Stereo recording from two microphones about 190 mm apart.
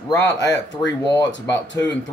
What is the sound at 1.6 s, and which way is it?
Speech, 70° left (ahead or behind).